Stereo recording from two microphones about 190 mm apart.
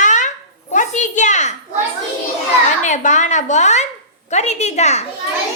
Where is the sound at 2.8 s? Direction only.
40° left (ahead or behind).